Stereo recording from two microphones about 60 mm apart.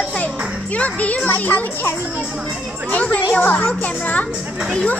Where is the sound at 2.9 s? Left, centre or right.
Left.